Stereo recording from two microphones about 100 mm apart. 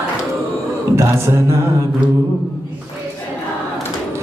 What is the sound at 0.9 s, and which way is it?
A capella, 30° right (ahead or behind).